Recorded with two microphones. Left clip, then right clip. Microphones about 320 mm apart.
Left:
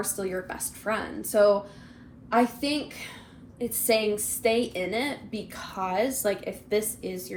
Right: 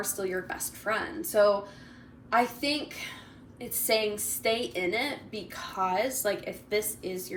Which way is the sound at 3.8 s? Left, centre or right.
Left.